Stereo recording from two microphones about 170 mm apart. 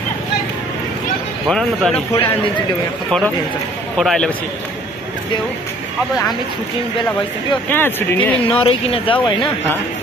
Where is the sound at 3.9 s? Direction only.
5° left (ahead or behind).